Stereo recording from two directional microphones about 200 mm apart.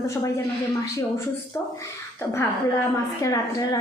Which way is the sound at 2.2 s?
10° left (ahead or behind).